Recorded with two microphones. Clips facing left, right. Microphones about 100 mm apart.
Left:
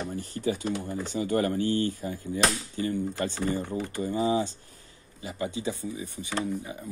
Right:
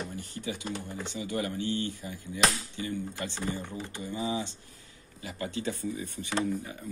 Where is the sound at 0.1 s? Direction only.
35° left (ahead or behind).